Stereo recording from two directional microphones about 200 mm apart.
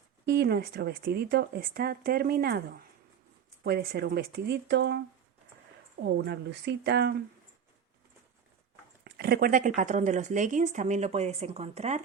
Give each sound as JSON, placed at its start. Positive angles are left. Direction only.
{"t": 0.3, "sound": "speech", "side_deg": -55}
{"t": 9.0, "sound": "speech", "side_deg": -55}